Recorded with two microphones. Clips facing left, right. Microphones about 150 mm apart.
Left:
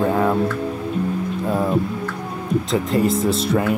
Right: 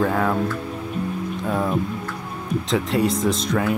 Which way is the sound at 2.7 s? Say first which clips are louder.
Left 1 dB; centre (ahead or behind).